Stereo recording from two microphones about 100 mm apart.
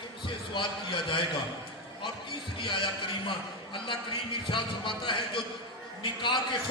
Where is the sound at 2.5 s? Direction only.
55° left (ahead or behind).